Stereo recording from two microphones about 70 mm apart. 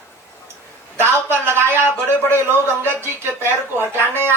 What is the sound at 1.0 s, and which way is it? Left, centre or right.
Speech, right.